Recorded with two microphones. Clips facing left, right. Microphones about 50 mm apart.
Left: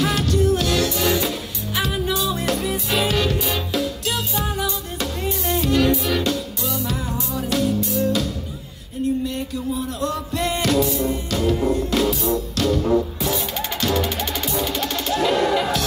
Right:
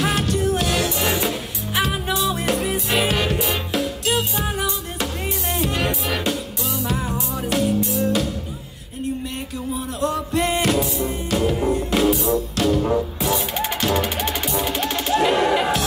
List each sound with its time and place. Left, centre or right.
0.0 s music: right
10.0 s music: centre